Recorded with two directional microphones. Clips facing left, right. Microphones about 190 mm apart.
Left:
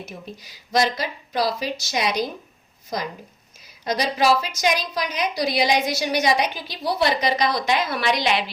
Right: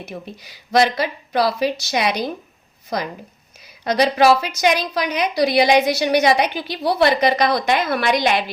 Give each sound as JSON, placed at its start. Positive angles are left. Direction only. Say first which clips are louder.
{"t": 0.0, "sound": "a woman's voice", "louder": "right 4 dB", "side_deg": -60}